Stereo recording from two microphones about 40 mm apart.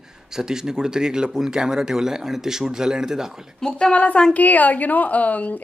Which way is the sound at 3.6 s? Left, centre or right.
Centre.